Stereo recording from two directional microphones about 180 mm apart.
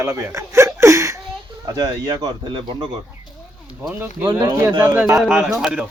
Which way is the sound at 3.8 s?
10° right (ahead or behind).